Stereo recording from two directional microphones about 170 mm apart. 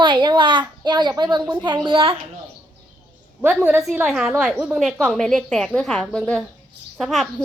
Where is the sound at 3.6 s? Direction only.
5° right (ahead or behind).